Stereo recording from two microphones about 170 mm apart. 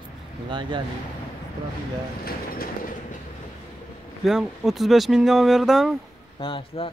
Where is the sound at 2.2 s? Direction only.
60° left (ahead or behind).